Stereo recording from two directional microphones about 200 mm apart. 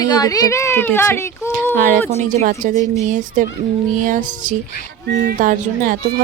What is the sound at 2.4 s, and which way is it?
Speech, 40° right (ahead or behind).